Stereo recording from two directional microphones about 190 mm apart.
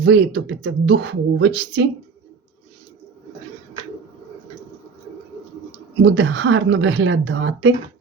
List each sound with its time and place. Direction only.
0.0 s speech: 65° right (ahead or behind)
6.0 s a woman's voice: 70° right (ahead or behind)